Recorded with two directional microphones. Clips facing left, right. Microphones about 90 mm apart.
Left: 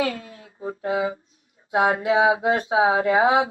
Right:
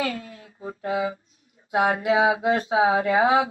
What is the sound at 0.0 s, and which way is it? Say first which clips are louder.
Speech: left 3 dB; 25° left (ahead or behind).